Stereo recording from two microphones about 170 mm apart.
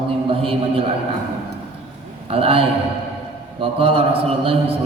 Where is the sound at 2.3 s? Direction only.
35° right (ahead or behind).